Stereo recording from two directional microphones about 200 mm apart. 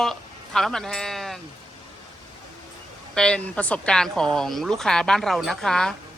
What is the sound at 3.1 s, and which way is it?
Speech, 5° left (ahead or behind).